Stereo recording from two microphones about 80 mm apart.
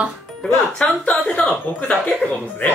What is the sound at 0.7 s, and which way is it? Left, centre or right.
Speech, centre.